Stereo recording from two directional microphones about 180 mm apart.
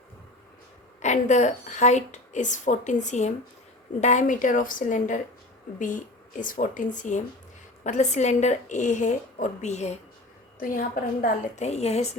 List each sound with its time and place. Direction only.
1.0 s a woman's voice: 40° left (ahead or behind)
6.4 s a woman's voice: 50° left (ahead or behind)
10.6 s a woman's voice: 50° left (ahead or behind)